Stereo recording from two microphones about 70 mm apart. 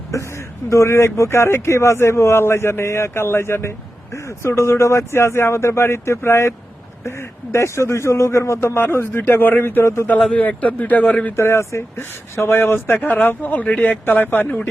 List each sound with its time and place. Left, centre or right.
0.1 s speech: left
10.1 s a man's voice: centre
11.3 s a man's voice: left